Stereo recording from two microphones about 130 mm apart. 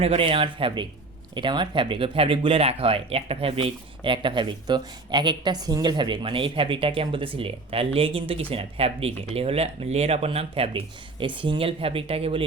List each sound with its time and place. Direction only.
0.0 s speech: 45° right (ahead or behind)